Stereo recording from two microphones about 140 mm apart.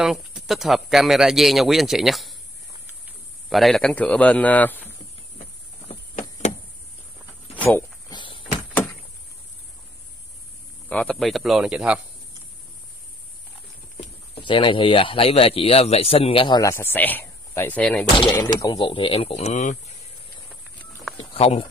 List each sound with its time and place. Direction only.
0.0 s speech: centre (ahead or behind)
3.4 s a man's voice: centre (ahead or behind)
8.1 s walk: 35° left (ahead or behind)
10.9 s speech: 10° left (ahead or behind)
14.3 s speech: 35° left (ahead or behind)
16.6 s speech: 15° left (ahead or behind)
18.4 s speech: 30° left (ahead or behind); by 20.0 s 60° left (ahead or behind)
21.3 s speech: 45° left (ahead or behind)